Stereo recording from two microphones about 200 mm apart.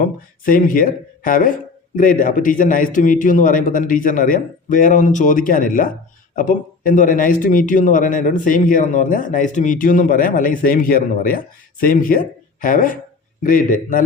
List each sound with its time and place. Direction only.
0.0 s a man's voice: 45° left (ahead or behind)